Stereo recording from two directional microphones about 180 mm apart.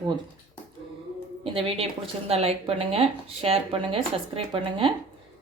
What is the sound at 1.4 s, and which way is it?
A woman's voice, 30° right (ahead or behind).